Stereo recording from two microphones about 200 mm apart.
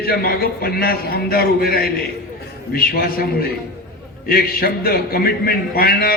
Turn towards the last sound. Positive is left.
turn(degrees=50)  # may be behind; listen again after turning